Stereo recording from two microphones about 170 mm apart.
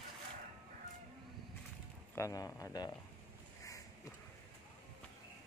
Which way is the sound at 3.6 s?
20° left (ahead or behind).